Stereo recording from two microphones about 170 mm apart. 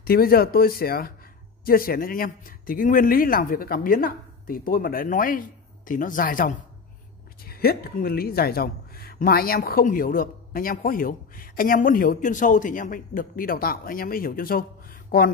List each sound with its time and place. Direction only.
0.0 s a woman's voice: 60° left (ahead or behind)
7.4 s a woman's voice: 65° left (ahead or behind)